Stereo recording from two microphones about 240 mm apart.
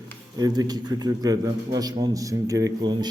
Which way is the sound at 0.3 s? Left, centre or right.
Centre.